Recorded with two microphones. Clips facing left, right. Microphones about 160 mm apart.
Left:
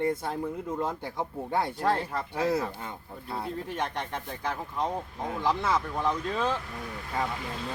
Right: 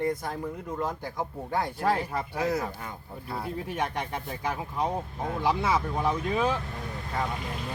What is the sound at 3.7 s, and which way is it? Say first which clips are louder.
Speech: right 3 dB; 10° right (ahead or behind).